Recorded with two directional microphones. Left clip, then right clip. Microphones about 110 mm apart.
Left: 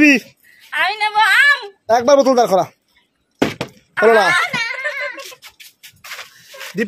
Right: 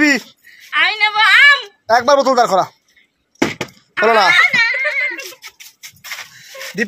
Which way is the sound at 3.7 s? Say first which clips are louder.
Left 2 dB; 60° left (ahead or behind).